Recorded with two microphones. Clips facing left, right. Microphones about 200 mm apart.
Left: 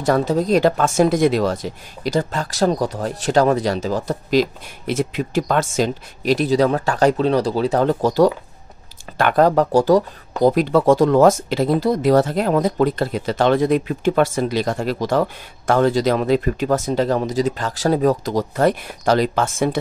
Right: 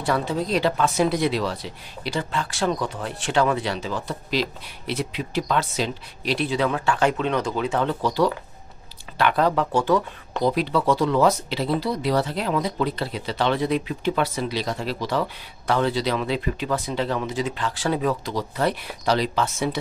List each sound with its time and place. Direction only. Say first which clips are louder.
0.0 s speech: left 6 dB; 40° left (ahead or behind)